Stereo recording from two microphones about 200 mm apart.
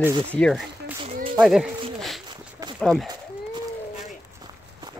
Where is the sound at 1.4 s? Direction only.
Centre (ahead or behind).